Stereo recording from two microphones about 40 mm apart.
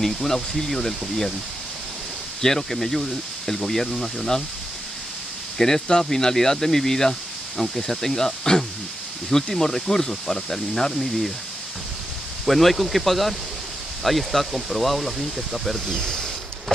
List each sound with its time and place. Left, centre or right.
0.0 s speech: centre
2.4 s speech: centre
5.6 s speech: centre
12.4 s speech: centre
15.9 s speech: centre